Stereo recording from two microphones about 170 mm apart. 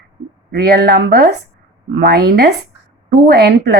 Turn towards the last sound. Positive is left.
turn(degrees=-75)  # may be behind; listen again after turning